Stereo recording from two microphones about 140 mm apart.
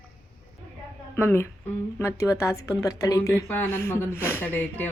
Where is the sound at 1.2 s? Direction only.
15° left (ahead or behind).